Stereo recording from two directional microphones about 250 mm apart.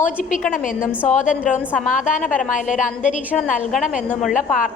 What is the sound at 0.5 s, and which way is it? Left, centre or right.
Speech, left.